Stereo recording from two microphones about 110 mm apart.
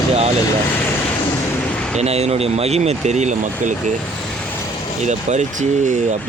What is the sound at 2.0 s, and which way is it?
Speech, 75° right (ahead or behind).